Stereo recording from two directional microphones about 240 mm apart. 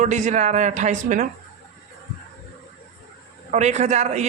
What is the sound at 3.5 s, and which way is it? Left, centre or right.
Speech, right.